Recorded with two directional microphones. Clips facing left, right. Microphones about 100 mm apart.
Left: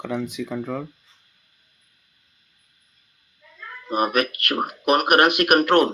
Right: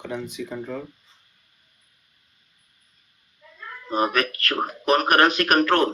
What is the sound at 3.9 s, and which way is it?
Speech, 15° left (ahead or behind).